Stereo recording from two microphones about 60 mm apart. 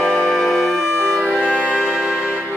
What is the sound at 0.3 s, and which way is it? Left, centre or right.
Music, centre.